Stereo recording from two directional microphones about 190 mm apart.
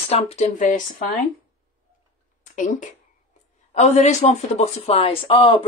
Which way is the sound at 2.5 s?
40° left (ahead or behind).